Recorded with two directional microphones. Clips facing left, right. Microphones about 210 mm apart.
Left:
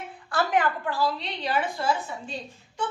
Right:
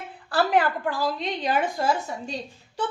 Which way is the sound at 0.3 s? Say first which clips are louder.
Right 3 dB; 40° right (ahead or behind).